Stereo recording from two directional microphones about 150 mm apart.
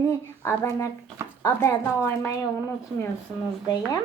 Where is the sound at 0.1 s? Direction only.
15° left (ahead or behind).